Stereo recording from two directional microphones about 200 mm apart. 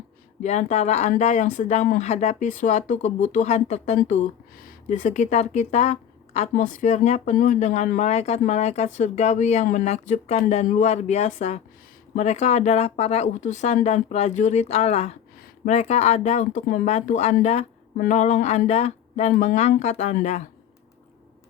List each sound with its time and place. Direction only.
0.4 s speech: 35° left (ahead or behind)